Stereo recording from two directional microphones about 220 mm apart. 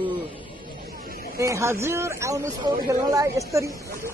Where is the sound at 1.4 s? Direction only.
15° right (ahead or behind).